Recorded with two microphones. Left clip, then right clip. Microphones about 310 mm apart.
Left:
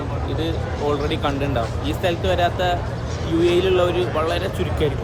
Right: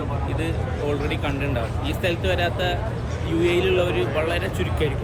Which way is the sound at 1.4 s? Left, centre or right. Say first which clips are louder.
Left 3 dB; centre.